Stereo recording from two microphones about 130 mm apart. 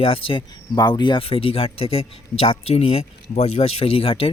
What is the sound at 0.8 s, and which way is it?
Speech, 35° left (ahead or behind).